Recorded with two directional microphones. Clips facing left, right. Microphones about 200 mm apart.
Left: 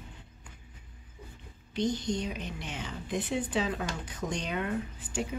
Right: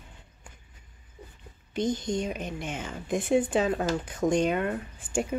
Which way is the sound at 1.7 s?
50° right (ahead or behind).